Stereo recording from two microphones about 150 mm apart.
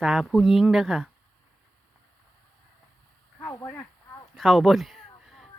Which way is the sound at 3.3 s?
15° left (ahead or behind).